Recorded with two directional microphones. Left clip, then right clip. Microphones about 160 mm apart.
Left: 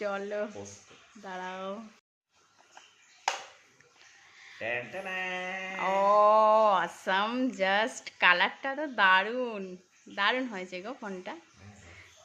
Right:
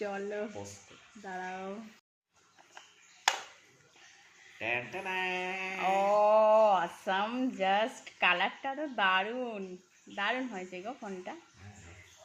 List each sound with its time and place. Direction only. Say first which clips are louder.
0.0 s mantra: left 4 dB; 20° left (ahead or behind)
4.5 s mantra: even; 20° left (ahead or behind)